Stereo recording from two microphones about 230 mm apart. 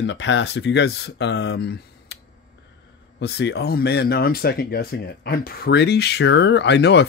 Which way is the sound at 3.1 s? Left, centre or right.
Left.